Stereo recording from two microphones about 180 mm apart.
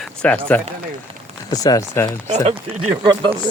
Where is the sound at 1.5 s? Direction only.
20° left (ahead or behind).